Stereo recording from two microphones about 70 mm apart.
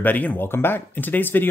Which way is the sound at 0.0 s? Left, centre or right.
Left.